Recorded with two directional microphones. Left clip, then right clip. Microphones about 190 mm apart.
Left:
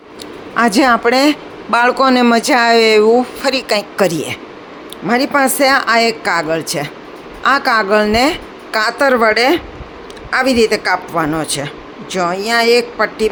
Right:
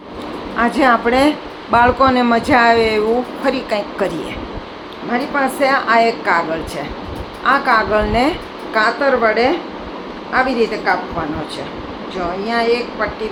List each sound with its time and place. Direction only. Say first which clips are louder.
0.5 s speech: left 2 dB; 60° left (ahead or behind)
5.0 s a woman's voice: left 5 dB; 75° left (ahead or behind)